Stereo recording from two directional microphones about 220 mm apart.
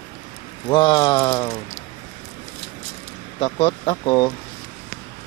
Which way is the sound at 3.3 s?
25° left (ahead or behind).